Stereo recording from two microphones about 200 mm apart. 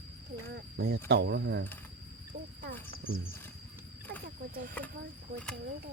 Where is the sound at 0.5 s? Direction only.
55° right (ahead or behind).